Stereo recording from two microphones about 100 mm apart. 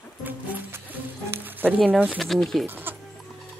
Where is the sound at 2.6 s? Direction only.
20° right (ahead or behind).